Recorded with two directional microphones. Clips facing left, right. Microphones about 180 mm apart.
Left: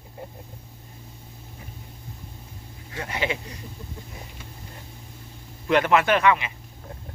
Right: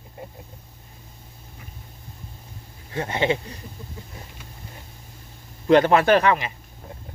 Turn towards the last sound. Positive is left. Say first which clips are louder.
# right 3 dB
turn(degrees=-40)  # may be behind; listen again after turning